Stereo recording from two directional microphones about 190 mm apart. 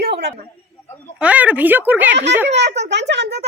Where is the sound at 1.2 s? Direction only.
5° right (ahead or behind).